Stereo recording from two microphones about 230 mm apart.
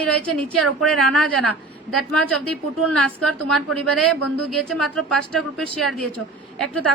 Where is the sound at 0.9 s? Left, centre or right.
Right.